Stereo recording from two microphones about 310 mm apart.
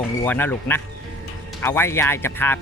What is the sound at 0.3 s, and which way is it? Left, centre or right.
Speech, centre.